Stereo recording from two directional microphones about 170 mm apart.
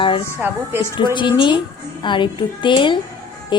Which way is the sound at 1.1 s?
30° left (ahead or behind).